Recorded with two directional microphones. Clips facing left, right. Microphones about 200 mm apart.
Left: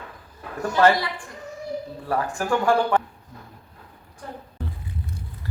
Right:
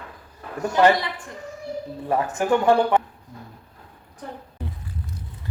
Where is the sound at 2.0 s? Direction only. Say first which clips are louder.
Right 3 dB; 20° right (ahead or behind).